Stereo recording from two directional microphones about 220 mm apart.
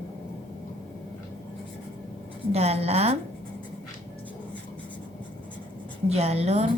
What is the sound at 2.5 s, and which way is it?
Speech, 30° right (ahead or behind).